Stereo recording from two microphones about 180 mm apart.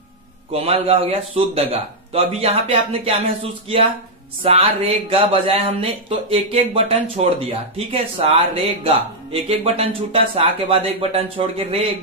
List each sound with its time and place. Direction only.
0.5 s speech: 35° right (ahead or behind)